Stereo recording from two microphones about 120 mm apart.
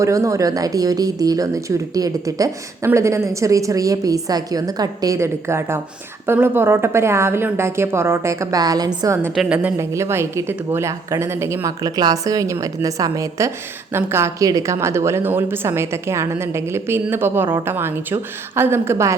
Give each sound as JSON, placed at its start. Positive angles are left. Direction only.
{"t": 0.0, "sound": "a woman's voice", "side_deg": -25}
{"t": 9.3, "sound": "a woman's voice", "side_deg": 0}
{"t": 9.7, "sound": "a woman's voice", "side_deg": -25}